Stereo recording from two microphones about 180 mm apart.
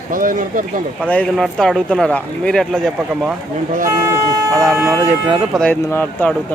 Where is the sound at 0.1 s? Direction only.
50° right (ahead or behind).